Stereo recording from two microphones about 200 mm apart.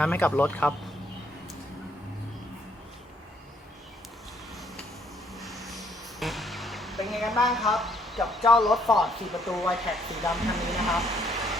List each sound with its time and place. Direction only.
0.0 s speech: 10° left (ahead or behind)
5.4 s a sound: centre (ahead or behind)
9.7 s speech: centre (ahead or behind)